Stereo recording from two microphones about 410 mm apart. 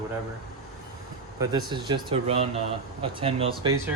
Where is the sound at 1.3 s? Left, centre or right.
Centre.